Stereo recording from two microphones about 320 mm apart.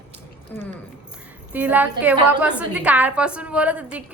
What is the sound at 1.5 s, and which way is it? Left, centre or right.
A woman's voice, centre.